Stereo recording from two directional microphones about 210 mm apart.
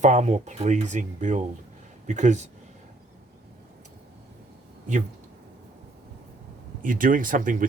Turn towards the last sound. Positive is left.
turn(degrees=-40)  # may be behind; listen again after turning